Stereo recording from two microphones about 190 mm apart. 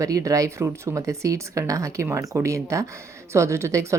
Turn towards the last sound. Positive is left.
turn(degrees=-15)  # may be behind; listen again after turning